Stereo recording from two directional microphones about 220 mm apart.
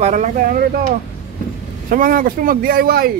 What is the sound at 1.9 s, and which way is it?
Speech, 40° right (ahead or behind).